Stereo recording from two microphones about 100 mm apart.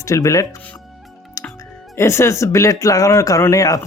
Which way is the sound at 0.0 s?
30° left (ahead or behind).